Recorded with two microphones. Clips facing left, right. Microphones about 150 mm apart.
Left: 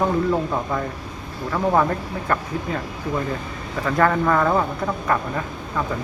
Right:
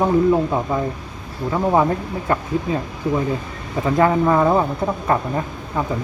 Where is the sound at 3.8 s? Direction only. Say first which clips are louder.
Right 3 dB; 20° right (ahead or behind).